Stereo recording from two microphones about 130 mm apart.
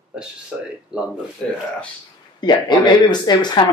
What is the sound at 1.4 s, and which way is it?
Speech, 5° left (ahead or behind).